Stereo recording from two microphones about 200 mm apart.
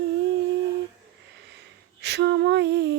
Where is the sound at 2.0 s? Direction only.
55° right (ahead or behind).